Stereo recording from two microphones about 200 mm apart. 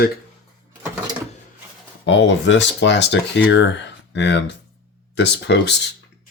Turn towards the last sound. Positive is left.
turn(degrees=60)  # may be behind; listen again after turning